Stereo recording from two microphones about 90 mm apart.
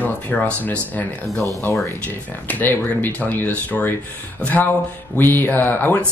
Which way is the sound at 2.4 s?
20° left (ahead or behind).